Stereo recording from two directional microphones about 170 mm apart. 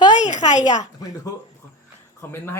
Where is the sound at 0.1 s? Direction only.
45° left (ahead or behind).